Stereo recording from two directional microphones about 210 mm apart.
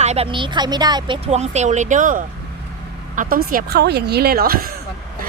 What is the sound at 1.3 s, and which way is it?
Speech, 30° right (ahead or behind).